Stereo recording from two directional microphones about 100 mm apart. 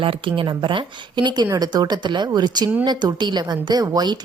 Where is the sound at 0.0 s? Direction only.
60° right (ahead or behind).